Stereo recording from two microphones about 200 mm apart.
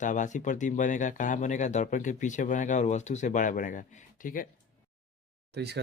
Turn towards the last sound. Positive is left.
turn(degrees=-55)  # may be behind; listen again after turning